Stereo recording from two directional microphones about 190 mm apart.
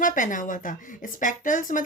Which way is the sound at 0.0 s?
45° left (ahead or behind).